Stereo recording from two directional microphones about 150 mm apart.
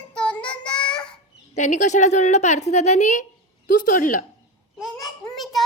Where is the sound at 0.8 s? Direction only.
5° left (ahead or behind).